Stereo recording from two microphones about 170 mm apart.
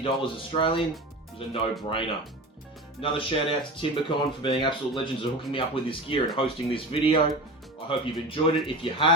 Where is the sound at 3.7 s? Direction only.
30° left (ahead or behind).